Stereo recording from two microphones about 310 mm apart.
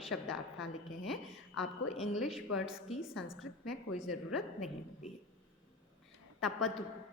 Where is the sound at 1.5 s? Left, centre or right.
Left.